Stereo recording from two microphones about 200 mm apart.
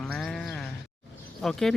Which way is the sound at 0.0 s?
5° left (ahead or behind).